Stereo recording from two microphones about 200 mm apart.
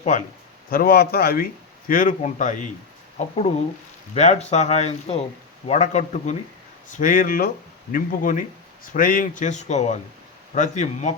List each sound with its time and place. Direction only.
0.7 s a man's voice: 45° left (ahead or behind)